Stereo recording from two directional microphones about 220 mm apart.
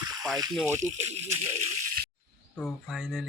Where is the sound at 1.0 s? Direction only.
30° right (ahead or behind).